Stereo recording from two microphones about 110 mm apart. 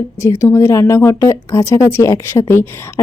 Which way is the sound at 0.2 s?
25° left (ahead or behind).